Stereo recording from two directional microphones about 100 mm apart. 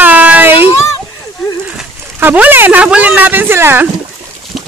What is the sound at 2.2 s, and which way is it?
Speech, 20° right (ahead or behind).